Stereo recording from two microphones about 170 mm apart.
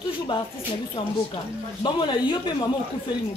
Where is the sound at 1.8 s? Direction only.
25° left (ahead or behind).